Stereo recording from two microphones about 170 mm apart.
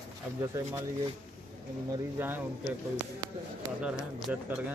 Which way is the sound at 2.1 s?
10° right (ahead or behind).